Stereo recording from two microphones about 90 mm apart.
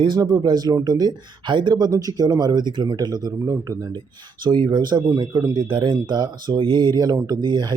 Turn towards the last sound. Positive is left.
turn(degrees=-55)  # may be behind; listen again after turning